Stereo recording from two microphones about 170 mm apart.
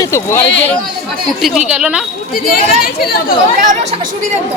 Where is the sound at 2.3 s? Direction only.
60° left (ahead or behind).